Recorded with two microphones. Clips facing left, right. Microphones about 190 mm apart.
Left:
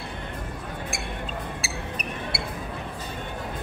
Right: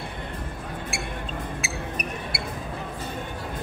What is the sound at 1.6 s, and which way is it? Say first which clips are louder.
Music: right 2 dB; 30° left (ahead or behind).